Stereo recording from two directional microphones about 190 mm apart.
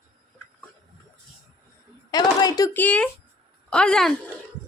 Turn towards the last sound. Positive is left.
turn(degrees=5)  # may be behind; listen again after turning